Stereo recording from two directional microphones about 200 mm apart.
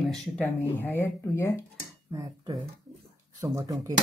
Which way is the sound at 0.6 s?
10° left (ahead or behind).